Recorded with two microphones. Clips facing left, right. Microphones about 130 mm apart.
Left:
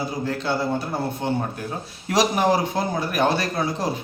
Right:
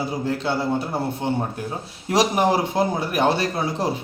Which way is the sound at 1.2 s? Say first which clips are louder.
Even; 25° right (ahead or behind).